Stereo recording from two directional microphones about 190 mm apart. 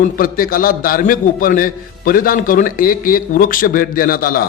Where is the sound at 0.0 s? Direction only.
50° left (ahead or behind).